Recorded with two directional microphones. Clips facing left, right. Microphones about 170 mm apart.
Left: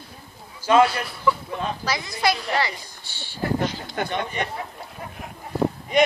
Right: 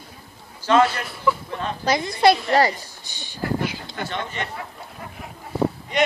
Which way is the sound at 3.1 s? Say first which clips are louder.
Left 1 dB; 15° right (ahead or behind).